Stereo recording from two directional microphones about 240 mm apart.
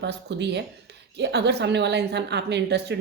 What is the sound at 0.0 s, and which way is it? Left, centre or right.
A woman's voice, right.